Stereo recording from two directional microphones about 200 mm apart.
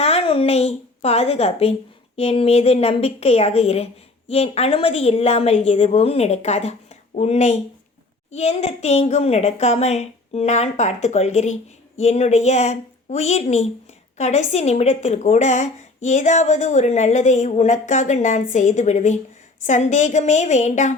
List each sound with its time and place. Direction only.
0.0 s a woman's voice: 30° left (ahead or behind)